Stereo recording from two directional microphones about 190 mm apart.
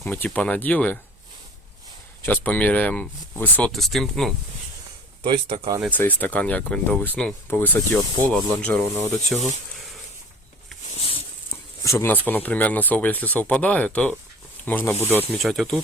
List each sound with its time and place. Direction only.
0.0 s speech: 10° left (ahead or behind)
2.2 s speech: 10° left (ahead or behind)
5.2 s speech: 30° right (ahead or behind)
5.9 s speech: 10° left (ahead or behind)
10.9 s a sound: 30° left (ahead or behind)
11.5 s speech: 15° left (ahead or behind)
15.3 s speech: centre (ahead or behind)